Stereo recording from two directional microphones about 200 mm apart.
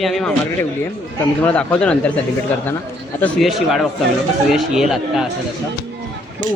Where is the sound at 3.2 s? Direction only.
Centre (ahead or behind).